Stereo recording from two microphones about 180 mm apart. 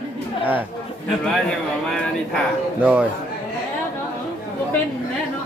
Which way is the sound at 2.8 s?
10° right (ahead or behind).